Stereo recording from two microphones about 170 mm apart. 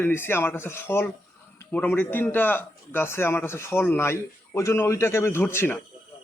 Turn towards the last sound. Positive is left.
turn(degrees=15)  # may be behind; listen again after turning